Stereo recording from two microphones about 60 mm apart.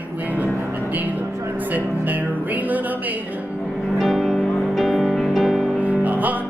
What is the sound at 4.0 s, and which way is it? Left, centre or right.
Music, centre.